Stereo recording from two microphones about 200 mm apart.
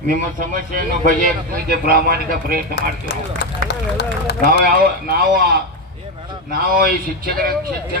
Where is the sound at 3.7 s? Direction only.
60° left (ahead or behind).